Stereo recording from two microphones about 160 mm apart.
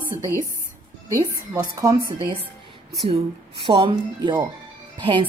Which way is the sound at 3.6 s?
30° right (ahead or behind).